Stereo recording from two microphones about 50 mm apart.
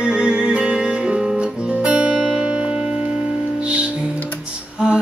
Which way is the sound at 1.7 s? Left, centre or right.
Right.